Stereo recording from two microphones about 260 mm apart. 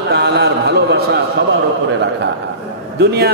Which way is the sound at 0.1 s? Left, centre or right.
Right.